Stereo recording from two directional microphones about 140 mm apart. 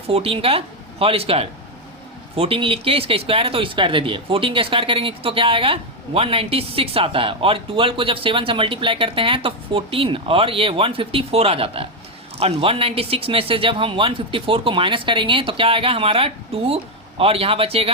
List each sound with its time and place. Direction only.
0.1 s speech: 45° right (ahead or behind)